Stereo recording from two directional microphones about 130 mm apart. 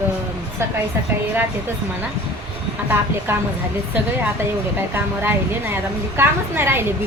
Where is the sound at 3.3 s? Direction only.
15° right (ahead or behind).